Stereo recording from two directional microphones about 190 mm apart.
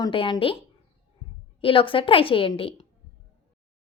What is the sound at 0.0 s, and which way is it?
Speech, 25° left (ahead or behind).